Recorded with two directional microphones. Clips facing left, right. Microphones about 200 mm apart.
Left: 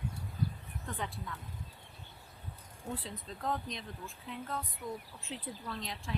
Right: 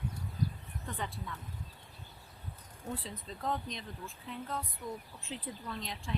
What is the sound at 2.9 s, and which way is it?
Speech, centre (ahead or behind).